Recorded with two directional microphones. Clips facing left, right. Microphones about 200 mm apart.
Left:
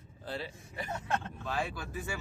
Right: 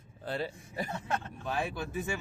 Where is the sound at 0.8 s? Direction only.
35° right (ahead or behind).